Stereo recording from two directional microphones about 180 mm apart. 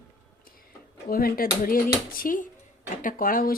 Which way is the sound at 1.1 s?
55° left (ahead or behind).